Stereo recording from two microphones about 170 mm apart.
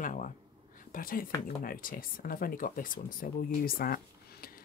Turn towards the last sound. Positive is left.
turn(degrees=60)  # may be behind; listen again after turning